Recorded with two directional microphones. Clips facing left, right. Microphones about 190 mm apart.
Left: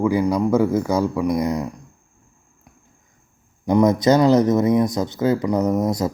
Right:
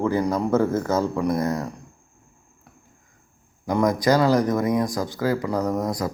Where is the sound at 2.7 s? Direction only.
10° left (ahead or behind).